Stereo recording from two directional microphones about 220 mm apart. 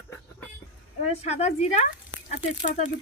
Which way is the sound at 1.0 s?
30° left (ahead or behind).